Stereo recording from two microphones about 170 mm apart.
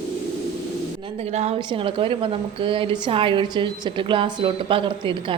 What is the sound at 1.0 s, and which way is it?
A woman's voice, 40° right (ahead or behind).